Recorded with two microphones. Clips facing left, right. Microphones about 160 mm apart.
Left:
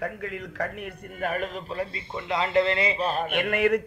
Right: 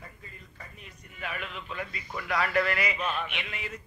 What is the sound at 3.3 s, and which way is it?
Mantra, 55° left (ahead or behind).